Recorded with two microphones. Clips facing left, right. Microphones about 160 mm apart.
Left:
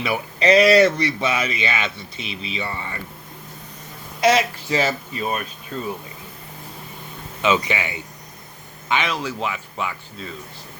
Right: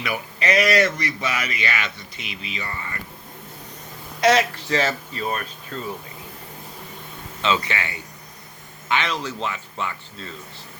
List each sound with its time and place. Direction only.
0.0 s speech: 30° left (ahead or behind)
4.2 s speech: 5° left (ahead or behind)
7.4 s speech: 15° left (ahead or behind)